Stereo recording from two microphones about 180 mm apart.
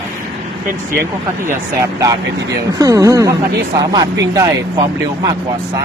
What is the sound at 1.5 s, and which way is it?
Speech, 15° right (ahead or behind).